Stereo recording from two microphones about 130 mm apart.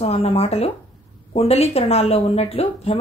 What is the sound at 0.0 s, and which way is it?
A woman's voice, 50° left (ahead or behind).